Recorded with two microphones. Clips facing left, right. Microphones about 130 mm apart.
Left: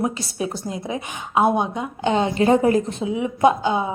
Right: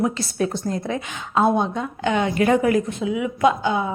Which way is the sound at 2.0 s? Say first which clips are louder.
Left 1 dB; 25° left (ahead or behind).